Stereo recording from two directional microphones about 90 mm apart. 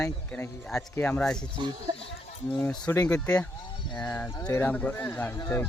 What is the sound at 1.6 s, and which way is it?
Speech, 60° right (ahead or behind).